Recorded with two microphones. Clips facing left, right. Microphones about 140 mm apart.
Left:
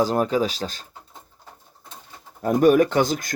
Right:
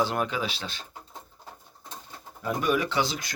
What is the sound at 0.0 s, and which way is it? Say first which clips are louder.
Speech: left 7 dB; 40° left (ahead or behind).